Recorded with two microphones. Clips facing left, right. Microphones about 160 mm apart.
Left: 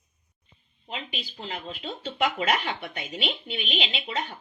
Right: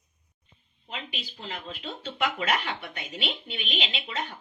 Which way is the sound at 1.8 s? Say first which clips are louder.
Left 3 dB; 35° left (ahead or behind).